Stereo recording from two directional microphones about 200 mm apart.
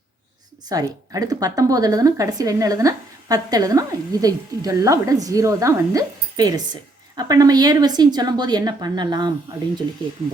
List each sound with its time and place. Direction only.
0.7 s a woman's voice: 20° right (ahead or behind)